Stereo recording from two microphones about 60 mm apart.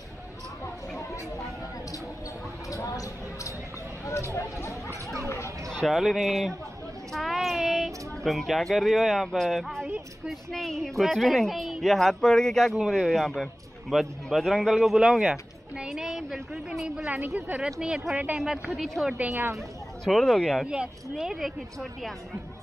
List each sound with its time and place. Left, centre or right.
2.7 s speech: left
4.0 s speech: left
5.7 s a woman's voice: centre
19.3 s speech: right
20.1 s a woman's voice: centre
20.6 s speech: centre